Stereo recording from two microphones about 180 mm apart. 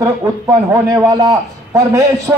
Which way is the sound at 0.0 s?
15° right (ahead or behind).